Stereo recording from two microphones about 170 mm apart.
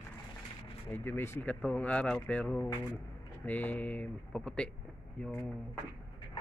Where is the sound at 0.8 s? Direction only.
10° left (ahead or behind).